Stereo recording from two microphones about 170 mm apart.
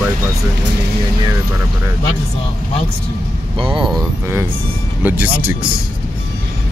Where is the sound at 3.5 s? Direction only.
30° right (ahead or behind).